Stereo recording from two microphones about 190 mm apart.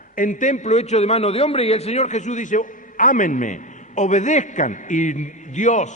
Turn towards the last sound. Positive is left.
turn(degrees=40)  # may be behind; listen again after turning